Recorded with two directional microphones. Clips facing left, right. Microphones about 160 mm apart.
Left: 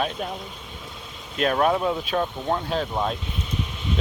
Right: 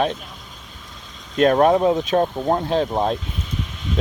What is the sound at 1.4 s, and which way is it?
Speech, 40° right (ahead or behind).